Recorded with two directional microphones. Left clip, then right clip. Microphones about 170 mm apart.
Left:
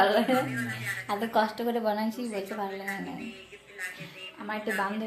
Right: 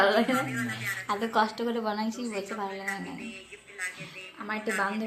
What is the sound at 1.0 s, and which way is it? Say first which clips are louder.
A woman's voice: even; 15° left (ahead or behind).